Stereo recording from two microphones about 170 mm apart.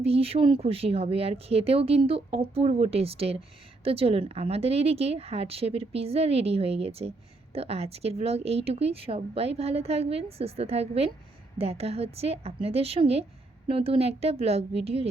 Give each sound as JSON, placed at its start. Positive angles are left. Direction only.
{"t": 0.0, "sound": "speech", "side_deg": -35}